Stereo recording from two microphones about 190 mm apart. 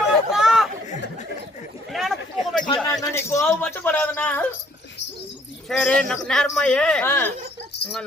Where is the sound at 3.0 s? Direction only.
15° left (ahead or behind).